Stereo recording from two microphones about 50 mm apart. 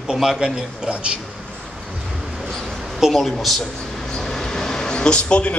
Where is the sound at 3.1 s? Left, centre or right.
Centre.